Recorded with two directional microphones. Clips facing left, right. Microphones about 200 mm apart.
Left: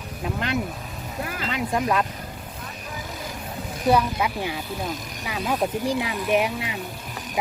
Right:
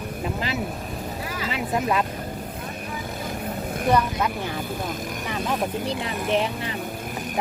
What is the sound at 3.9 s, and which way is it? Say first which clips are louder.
Speech: left 1 dB; 10° left (ahead or behind).